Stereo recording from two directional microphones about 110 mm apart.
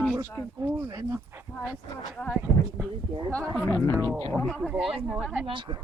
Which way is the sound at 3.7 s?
25° left (ahead or behind).